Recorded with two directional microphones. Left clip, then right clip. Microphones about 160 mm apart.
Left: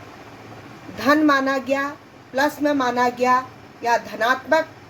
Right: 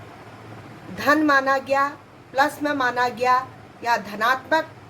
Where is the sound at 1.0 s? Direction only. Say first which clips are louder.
Left 1 dB; 30° left (ahead or behind).